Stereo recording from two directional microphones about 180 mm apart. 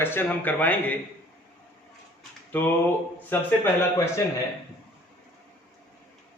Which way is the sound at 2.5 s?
10° left (ahead or behind).